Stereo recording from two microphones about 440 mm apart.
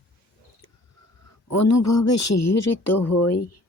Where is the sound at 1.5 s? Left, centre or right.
Left.